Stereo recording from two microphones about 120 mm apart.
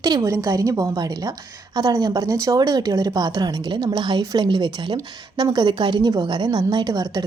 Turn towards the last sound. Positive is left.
turn(degrees=-35)  # may be behind; listen again after turning